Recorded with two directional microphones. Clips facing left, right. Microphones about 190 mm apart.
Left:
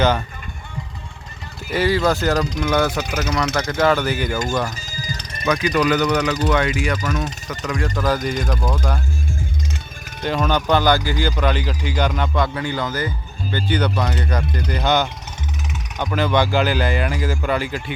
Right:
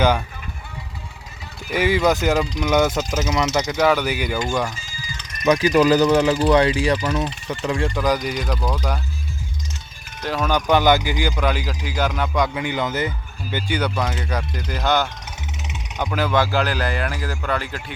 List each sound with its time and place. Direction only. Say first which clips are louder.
1.7 s speech: even; 15° right (ahead or behind)
3.0 s speech: right 1 dB; 65° left (ahead or behind)
3.3 s speech: right 1 dB; 20° right (ahead or behind)
3.8 s speech: left 2 dB; 10° right (ahead or behind)
4.9 s music: left 6 dB; 40° left (ahead or behind)
5.5 s speech: right 3 dB; 35° right (ahead or behind)
7.9 s speech: left 1 dB; 10° right (ahead or behind)
8.2 s speech: left 2 dB; 50° left (ahead or behind)
10.2 s speech: left 1 dB; 5° right (ahead or behind)